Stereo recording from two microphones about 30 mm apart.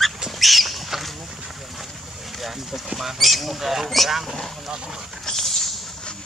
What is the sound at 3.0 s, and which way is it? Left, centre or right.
Speech, centre.